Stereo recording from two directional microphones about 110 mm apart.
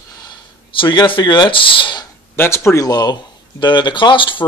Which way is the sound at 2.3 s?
20° left (ahead or behind).